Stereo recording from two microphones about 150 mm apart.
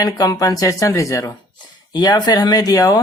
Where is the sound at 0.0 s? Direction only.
25° left (ahead or behind).